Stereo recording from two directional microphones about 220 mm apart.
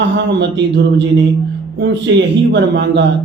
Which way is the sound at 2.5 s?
50° right (ahead or behind).